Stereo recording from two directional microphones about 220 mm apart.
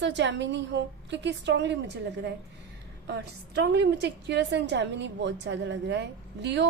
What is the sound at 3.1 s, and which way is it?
A woman's voice, 50° right (ahead or behind).